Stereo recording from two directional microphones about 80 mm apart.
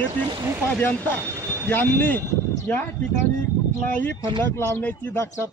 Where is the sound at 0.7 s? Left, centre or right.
Left.